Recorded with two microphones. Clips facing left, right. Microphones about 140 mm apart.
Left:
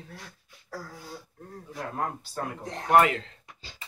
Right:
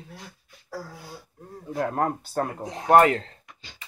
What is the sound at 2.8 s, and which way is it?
Speech, 40° right (ahead or behind).